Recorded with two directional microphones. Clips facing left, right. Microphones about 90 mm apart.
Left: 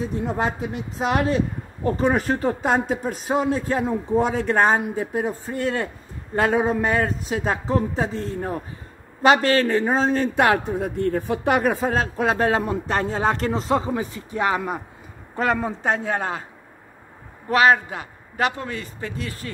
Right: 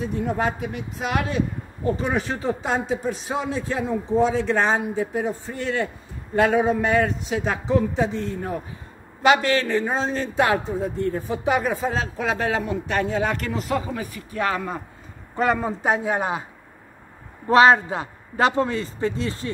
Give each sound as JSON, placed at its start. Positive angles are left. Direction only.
{"t": 0.4, "sound": "speech", "side_deg": 30}
{"t": 2.0, "sound": "a man's voice", "side_deg": 45}
{"t": 15.3, "sound": "a man's voice", "side_deg": 0}
{"t": 17.5, "sound": "a man's voice", "side_deg": -30}